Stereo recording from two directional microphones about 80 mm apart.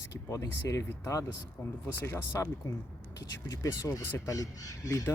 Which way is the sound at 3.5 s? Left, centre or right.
Left.